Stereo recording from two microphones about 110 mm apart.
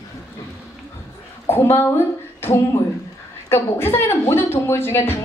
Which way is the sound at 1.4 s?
20° left (ahead or behind).